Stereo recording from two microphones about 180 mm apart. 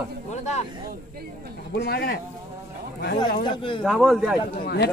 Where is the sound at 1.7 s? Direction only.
65° left (ahead or behind).